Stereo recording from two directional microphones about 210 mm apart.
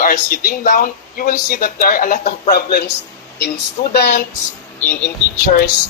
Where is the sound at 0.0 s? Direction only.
40° left (ahead or behind).